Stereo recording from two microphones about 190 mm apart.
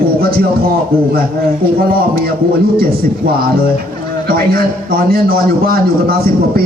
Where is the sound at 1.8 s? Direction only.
50° right (ahead or behind).